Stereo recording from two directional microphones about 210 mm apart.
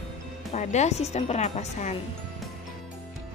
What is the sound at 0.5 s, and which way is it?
A woman's voice, 30° left (ahead or behind).